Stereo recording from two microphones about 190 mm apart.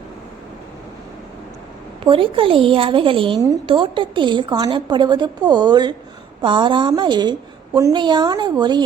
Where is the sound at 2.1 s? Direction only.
25° right (ahead or behind).